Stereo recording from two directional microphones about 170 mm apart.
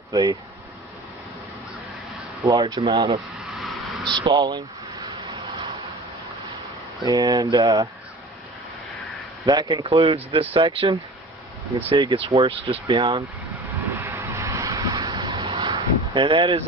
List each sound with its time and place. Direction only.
0.1 s speech: 25° right (ahead or behind)
2.4 s speech: 25° right (ahead or behind)
7.0 s speech: 25° right (ahead or behind)
9.5 s speech: 25° right (ahead or behind)
13.9 s vehicle: 15° right (ahead or behind)